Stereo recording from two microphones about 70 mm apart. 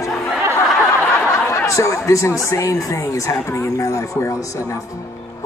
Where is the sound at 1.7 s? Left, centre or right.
Left.